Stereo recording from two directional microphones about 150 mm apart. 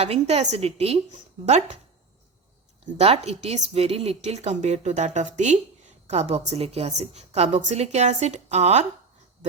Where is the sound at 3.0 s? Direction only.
45° right (ahead or behind).